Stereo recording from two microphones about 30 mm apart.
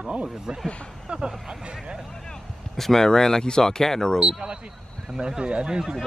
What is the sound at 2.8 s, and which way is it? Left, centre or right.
Speech, centre.